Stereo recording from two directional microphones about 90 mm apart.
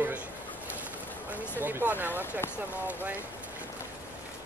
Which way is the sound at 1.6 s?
20° right (ahead or behind).